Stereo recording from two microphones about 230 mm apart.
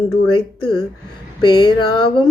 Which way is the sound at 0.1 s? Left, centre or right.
Centre.